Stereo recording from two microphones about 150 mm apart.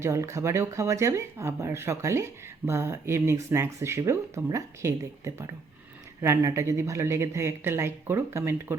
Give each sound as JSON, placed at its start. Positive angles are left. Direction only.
{"t": 0.0, "sound": "speech", "side_deg": -20}